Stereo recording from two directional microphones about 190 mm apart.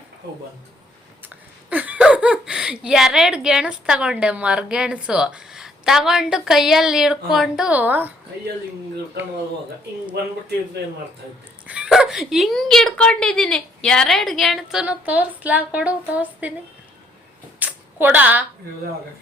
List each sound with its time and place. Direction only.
1.7 s speech: 10° right (ahead or behind)
11.6 s speech: 5° right (ahead or behind)
17.6 s a sound: 10° right (ahead or behind)